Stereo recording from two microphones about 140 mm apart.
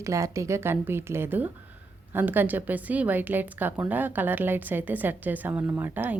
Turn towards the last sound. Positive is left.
turn(degrees=-15)  # may be behind; listen again after turning